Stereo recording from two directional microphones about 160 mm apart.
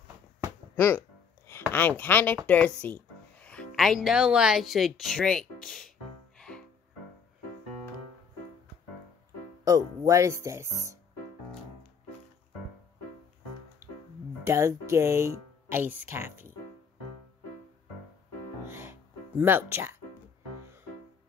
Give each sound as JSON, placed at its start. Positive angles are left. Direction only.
{"t": 0.7, "sound": "speech", "side_deg": 15}
{"t": 5.7, "sound": "music", "side_deg": 5}
{"t": 9.7, "sound": "speech", "side_deg": -20}
{"t": 14.4, "sound": "speech", "side_deg": -20}
{"t": 18.7, "sound": "music", "side_deg": -15}